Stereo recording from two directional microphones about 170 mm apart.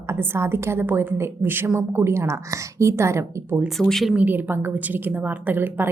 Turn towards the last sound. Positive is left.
turn(degrees=-10)  # may be behind; listen again after turning